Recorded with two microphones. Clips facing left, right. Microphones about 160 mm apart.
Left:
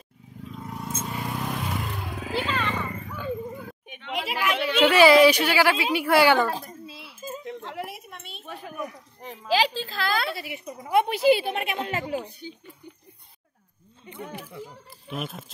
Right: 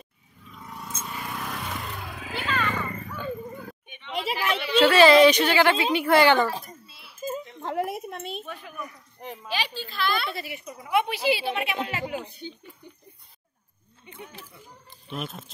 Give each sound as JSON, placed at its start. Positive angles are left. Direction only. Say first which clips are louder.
{"t": 0.9, "sound": "vehicle", "louder": "left 3 dB", "side_deg": 30}
{"t": 2.1, "sound": "roaring cats", "louder": "left 2 dB", "side_deg": 30}
{"t": 2.8, "sound": "a sound", "louder": "even", "side_deg": 5}
{"t": 3.8, "sound": "chatter", "louder": "left 4 dB", "side_deg": 90}
{"t": 4.1, "sound": "a sound", "louder": "even", "side_deg": -30}
{"t": 4.7, "sound": "a woman's voice", "louder": "even", "side_deg": 15}
{"t": 7.6, "sound": "a sound", "louder": "right 7 dB", "side_deg": -50}
{"t": 9.5, "sound": "a woman's voice", "louder": "left 9 dB", "side_deg": 90}
{"t": 10.3, "sound": "speech", "louder": "left 1 dB", "side_deg": 15}
{"t": 10.9, "sound": "speech", "louder": "left 4 dB", "side_deg": 45}
{"t": 14.2, "sound": "speech", "louder": "left 7 dB", "side_deg": 85}
{"t": 14.9, "sound": "speech", "louder": "right 1 dB", "side_deg": 0}